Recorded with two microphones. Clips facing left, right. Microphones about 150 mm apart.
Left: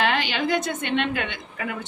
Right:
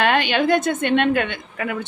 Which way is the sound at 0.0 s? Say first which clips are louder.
Right 5 dB; 55° right (ahead or behind).